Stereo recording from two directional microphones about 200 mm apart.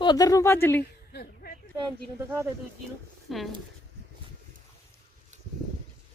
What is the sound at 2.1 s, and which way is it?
Speech, 10° right (ahead or behind).